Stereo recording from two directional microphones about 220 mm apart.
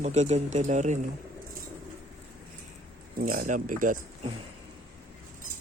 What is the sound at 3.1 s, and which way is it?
Speech, 40° right (ahead or behind).